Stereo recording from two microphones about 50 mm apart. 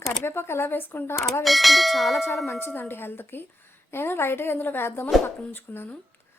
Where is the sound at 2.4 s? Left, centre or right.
Left.